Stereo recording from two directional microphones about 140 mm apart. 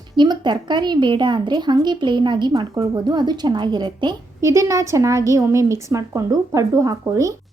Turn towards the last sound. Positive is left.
turn(degrees=-20)  # may be behind; listen again after turning